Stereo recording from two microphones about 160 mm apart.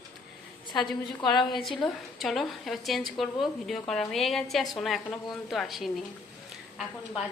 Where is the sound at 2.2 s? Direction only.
Centre (ahead or behind).